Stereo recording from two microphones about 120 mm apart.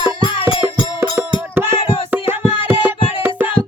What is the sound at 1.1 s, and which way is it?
Music, 20° right (ahead or behind).